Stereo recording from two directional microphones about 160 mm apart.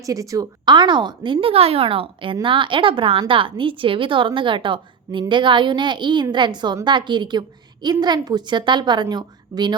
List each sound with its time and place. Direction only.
0.0 s a woman's voice: 20° right (ahead or behind)